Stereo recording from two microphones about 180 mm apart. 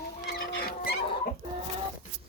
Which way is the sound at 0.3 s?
60° left (ahead or behind).